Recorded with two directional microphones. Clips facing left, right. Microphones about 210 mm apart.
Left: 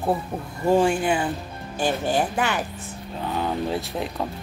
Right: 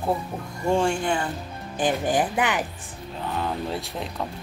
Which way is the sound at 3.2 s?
Centre (ahead or behind).